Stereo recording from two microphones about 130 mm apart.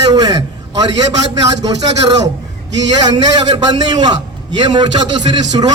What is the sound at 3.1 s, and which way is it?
A man's voice, 35° right (ahead or behind).